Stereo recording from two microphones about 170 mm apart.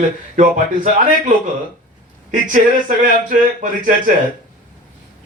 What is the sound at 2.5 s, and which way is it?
A man's voice, 50° right (ahead or behind).